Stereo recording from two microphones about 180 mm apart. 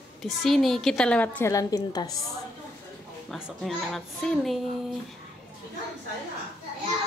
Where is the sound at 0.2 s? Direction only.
Centre (ahead or behind); by 2.1 s 20° left (ahead or behind).